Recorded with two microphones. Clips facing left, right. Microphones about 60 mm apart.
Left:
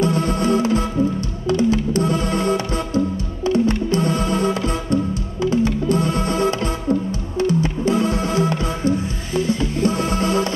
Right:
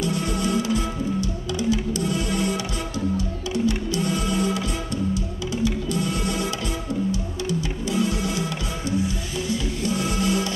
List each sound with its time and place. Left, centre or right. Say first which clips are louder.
0.0 s music: left 6 dB; left